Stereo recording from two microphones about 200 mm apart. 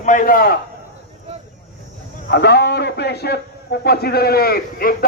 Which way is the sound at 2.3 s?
55° left (ahead or behind).